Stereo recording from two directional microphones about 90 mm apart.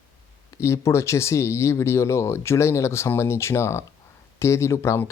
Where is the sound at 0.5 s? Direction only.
30° left (ahead or behind).